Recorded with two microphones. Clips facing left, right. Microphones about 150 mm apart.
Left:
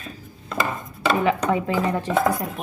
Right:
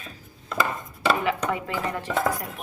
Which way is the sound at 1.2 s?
25° left (ahead or behind).